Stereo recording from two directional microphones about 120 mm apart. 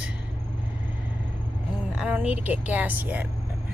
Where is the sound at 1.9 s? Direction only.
10° right (ahead or behind).